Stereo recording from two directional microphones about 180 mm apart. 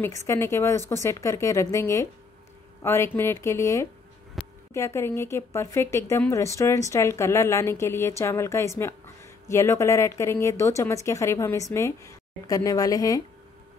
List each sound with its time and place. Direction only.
0.0 s a woman's voice: 15° left (ahead or behind)
4.4 s a sound: centre (ahead or behind)
4.7 s a woman's voice: 15° left (ahead or behind)